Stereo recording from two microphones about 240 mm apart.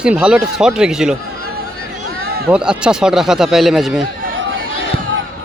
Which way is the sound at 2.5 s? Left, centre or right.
Centre.